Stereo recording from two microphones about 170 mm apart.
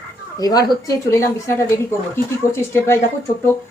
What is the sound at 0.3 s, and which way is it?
Speech, 20° left (ahead or behind).